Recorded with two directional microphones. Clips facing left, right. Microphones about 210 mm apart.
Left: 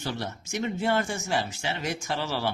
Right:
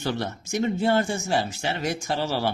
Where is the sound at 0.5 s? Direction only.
35° right (ahead or behind).